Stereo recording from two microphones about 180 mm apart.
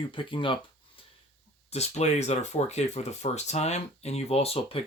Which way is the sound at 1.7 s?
35° left (ahead or behind).